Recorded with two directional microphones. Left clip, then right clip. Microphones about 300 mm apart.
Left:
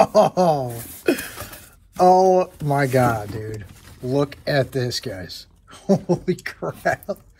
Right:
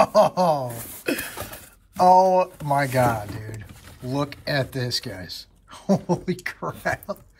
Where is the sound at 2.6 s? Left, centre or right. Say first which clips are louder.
Left 2 dB; right.